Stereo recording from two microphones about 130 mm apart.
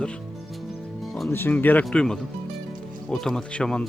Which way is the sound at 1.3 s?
15° left (ahead or behind).